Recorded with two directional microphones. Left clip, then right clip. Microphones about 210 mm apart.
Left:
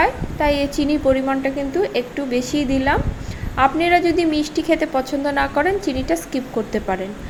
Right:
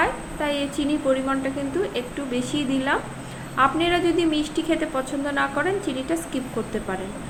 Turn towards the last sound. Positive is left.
turn(degrees=25)  # may be behind; listen again after turning